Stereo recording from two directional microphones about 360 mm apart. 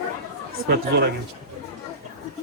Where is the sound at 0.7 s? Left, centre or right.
Right.